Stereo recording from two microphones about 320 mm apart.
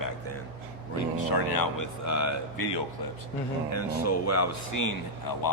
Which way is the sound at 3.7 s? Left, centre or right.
Left.